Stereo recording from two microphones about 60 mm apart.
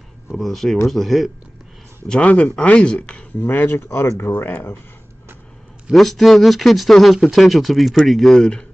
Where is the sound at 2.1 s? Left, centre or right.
Centre.